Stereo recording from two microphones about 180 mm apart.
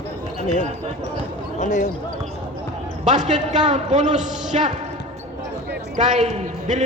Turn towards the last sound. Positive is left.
turn(degrees=-40)  # may be behind; listen again after turning